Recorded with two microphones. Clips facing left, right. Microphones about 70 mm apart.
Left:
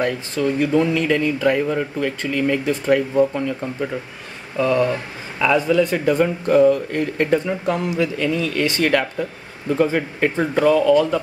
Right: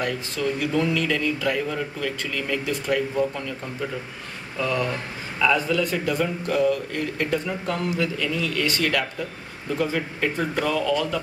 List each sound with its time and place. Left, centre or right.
0.0 s speech: left
4.6 s speech: left
8.2 s speech: left